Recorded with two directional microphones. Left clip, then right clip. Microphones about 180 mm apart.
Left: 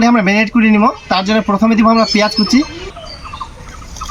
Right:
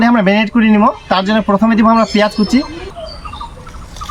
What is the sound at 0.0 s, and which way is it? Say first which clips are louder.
Speech: even; centre (ahead or behind).